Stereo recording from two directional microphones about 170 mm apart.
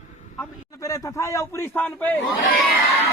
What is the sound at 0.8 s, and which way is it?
A man's voice, 20° left (ahead or behind).